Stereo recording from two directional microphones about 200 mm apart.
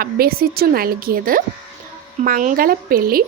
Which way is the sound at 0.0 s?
50° right (ahead or behind).